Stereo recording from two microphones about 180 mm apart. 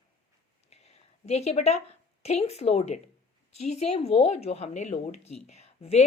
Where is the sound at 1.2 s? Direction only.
35° left (ahead or behind).